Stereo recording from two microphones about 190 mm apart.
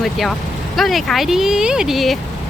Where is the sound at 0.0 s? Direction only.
Centre (ahead or behind).